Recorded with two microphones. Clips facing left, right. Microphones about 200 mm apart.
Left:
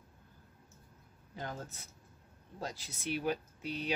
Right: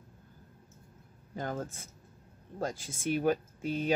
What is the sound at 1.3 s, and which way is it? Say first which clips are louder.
Speech: right 7 dB; 50° right (ahead or behind).